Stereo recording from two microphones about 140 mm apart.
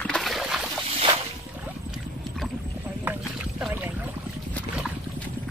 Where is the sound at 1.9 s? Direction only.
Centre (ahead or behind).